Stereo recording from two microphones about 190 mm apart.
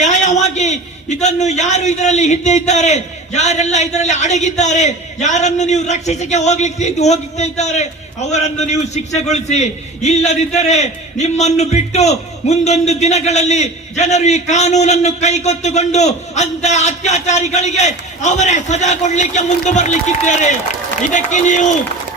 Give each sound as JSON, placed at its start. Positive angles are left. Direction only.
{"t": 0.0, "sound": "a man's voice", "side_deg": 40}